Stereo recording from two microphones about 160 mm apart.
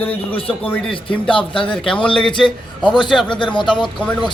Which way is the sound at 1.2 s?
30° left (ahead or behind).